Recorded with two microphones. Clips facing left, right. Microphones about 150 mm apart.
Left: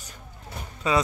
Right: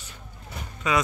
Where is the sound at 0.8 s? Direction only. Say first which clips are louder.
Left 1 dB; 30° left (ahead or behind).